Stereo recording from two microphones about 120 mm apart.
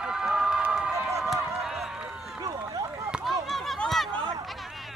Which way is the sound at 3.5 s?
Centre (ahead or behind).